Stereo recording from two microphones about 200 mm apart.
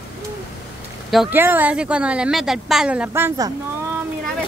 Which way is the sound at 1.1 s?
5° right (ahead or behind).